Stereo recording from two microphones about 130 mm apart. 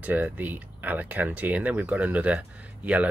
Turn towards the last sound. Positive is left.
turn(degrees=-10)  # may be behind; listen again after turning